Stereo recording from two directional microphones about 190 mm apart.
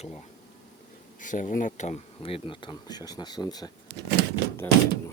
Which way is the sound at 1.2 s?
45° left (ahead or behind).